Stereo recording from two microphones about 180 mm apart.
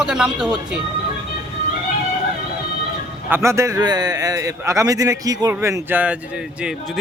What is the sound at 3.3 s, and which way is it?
A man's voice, 15° right (ahead or behind).